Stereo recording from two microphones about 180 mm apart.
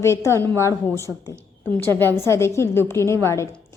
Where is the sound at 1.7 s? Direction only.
10° left (ahead or behind).